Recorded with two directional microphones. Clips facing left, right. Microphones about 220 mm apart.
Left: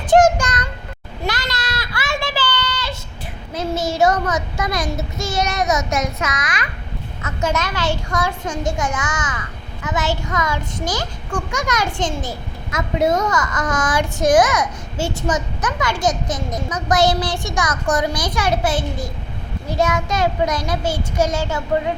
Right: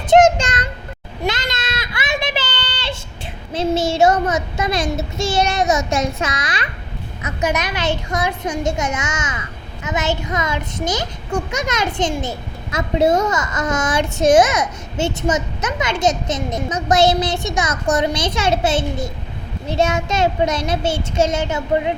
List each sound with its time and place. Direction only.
0.1 s child singing: 25° right (ahead or behind)
1.2 s a sound: 20° right (ahead or behind)
3.5 s child singing: 30° right (ahead or behind)
7.2 s a child's voice: 20° right (ahead or behind)